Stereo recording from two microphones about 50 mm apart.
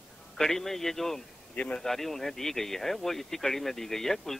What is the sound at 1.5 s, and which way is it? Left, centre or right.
Speech, left.